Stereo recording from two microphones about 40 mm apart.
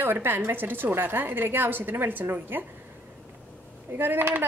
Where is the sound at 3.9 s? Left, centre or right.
Right.